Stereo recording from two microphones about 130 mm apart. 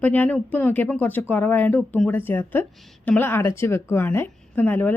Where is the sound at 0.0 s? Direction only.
15° left (ahead or behind).